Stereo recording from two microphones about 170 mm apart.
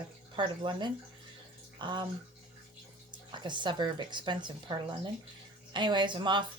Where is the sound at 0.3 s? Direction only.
30° right (ahead or behind).